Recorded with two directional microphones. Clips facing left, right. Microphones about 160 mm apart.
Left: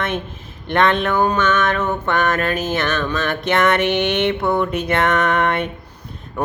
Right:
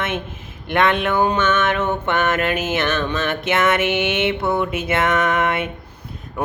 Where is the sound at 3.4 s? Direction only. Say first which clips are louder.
Left 2 dB; 5° right (ahead or behind).